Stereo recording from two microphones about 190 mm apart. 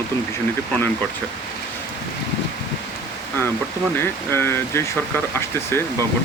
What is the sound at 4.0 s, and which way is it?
Speech, 10° left (ahead or behind).